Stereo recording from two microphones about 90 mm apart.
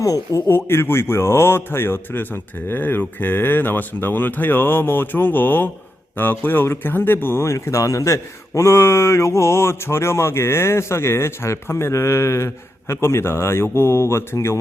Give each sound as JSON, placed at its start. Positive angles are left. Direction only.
{"t": 0.0, "sound": "speech", "side_deg": 40}
{"t": 0.5, "sound": "speech", "side_deg": 25}